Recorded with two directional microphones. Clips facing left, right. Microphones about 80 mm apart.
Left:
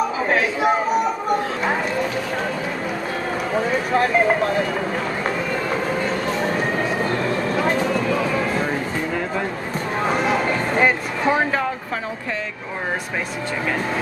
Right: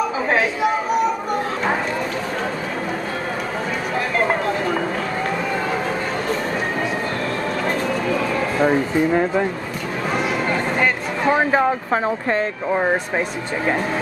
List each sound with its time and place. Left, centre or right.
8.5 s speech: right
11.3 s speech: right